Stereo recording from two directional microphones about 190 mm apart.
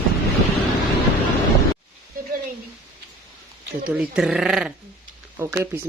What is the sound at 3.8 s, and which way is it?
Speech, 5° right (ahead or behind).